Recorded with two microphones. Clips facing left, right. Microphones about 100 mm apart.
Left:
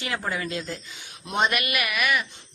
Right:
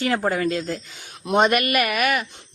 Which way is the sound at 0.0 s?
45° right (ahead or behind).